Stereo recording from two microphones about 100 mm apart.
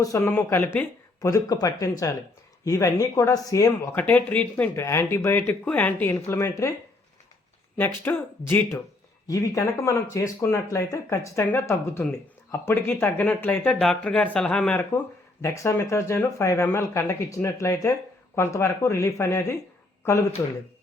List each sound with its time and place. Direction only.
0.0 s speech: 35° left (ahead or behind)
0.3 s speech: 20° left (ahead or behind)
1.2 s speech: 35° left (ahead or behind)
3.9 s speech: 15° left (ahead or behind)
4.7 s speech: 25° left (ahead or behind)
7.8 s speech: 20° left (ahead or behind)
9.2 s speech: 35° left (ahead or behind)